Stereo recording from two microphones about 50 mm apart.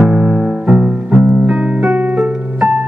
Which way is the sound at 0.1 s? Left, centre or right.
Right.